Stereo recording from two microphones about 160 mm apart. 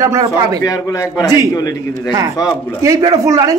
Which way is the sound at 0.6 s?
20° left (ahead or behind).